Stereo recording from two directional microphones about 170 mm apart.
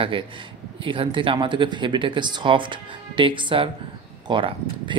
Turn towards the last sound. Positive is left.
turn(degrees=-30)  # may be behind; listen again after turning